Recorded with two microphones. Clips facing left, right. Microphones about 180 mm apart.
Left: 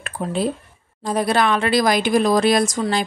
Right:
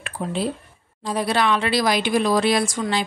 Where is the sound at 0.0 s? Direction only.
45° left (ahead or behind).